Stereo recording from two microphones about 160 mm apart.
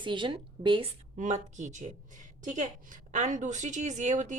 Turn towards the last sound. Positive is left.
turn(degrees=-50)  # may be behind; listen again after turning